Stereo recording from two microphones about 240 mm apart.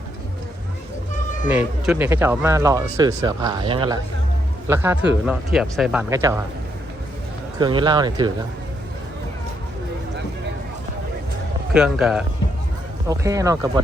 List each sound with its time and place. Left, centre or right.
1.5 s speech: centre
4.7 s speech: centre
7.6 s speech: centre
11.7 s a man's voice: centre
13.1 s speech: centre